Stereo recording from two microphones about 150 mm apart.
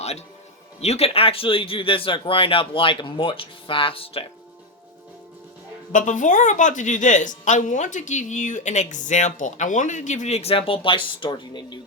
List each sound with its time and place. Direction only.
0.8 s speech: 45° left (ahead or behind)
5.9 s a woman's voice: 60° left (ahead or behind); by 11.8 s 30° left (ahead or behind)